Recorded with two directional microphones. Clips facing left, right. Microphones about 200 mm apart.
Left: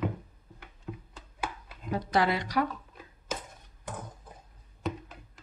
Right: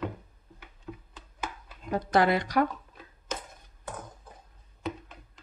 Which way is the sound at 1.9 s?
50° right (ahead or behind).